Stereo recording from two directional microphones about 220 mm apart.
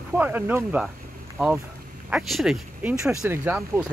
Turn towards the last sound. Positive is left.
turn(degrees=-10)  # may be behind; listen again after turning